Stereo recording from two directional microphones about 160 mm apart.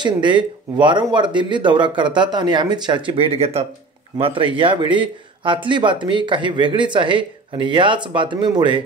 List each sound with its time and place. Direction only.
0.0 s speech: 30° right (ahead or behind)